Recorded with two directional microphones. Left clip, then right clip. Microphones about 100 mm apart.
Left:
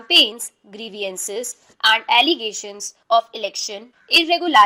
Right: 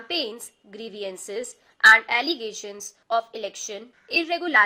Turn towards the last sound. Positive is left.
turn(degrees=40)  # may be behind; listen again after turning